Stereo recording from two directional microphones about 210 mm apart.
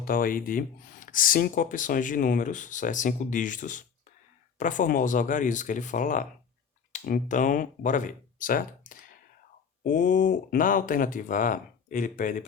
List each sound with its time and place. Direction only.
0.0 s speech: 45° left (ahead or behind)